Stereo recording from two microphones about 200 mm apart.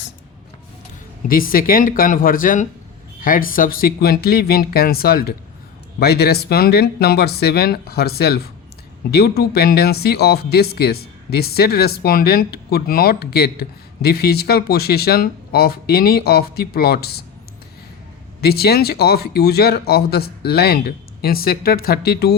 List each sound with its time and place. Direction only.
1.3 s speech: 45° left (ahead or behind)
18.3 s speech: 50° left (ahead or behind)